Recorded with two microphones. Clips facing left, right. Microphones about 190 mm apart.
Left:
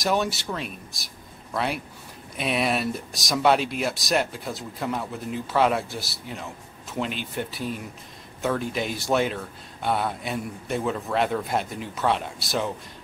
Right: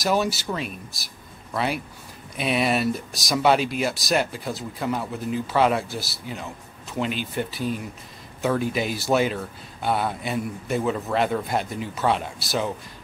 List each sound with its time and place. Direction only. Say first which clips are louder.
0.0 s speech: right 2 dB; centre (ahead or behind)